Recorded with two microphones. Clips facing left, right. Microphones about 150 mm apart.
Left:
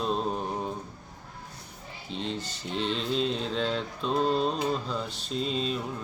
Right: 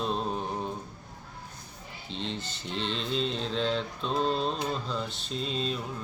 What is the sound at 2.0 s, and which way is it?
Speech, 5° left (ahead or behind).